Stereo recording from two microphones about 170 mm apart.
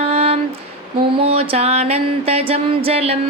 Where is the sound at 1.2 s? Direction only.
35° right (ahead or behind).